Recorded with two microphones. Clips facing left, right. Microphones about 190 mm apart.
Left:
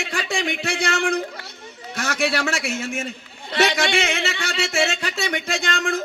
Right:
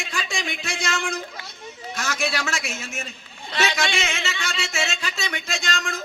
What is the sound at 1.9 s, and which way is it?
A man's voice, 60° left (ahead or behind).